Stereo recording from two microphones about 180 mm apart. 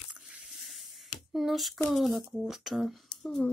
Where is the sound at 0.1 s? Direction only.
5° right (ahead or behind).